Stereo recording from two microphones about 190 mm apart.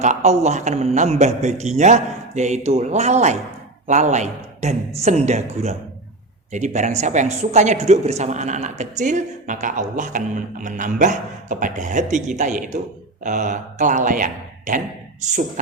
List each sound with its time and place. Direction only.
0.0 s a man's voice: 35° right (ahead or behind)